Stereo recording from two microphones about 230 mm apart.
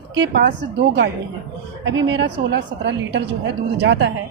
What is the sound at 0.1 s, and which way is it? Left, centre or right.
Speech, right.